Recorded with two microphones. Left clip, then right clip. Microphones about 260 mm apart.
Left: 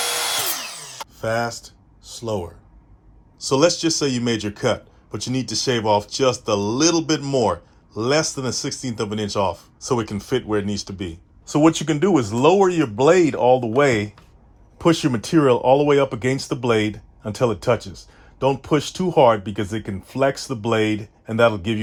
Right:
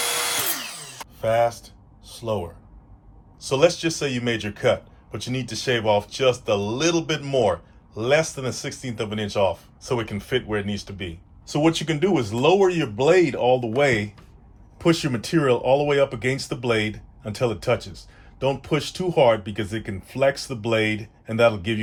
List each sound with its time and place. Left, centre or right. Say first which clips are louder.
0.0 s a sound: left 2 dB; centre
1.2 s speech: right 3 dB; left
9.9 s speech: left 2 dB; left
11.5 s speech: left 4 dB; left